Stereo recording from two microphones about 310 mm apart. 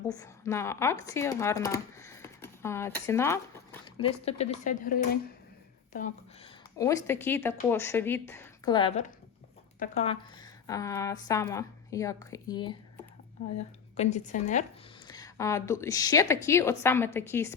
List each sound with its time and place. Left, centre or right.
0.1 s speech: centre
6.7 s a woman's voice: centre
13.9 s a woman's voice: left
15.0 s speech: centre